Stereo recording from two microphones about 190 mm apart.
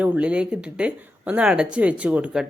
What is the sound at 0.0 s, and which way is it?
A woman's voice, 5° right (ahead or behind).